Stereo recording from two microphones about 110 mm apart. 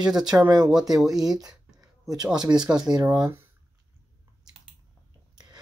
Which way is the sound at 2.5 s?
5° right (ahead or behind).